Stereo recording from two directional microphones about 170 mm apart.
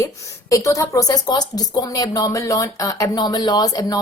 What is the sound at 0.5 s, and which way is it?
Speech, 20° left (ahead or behind).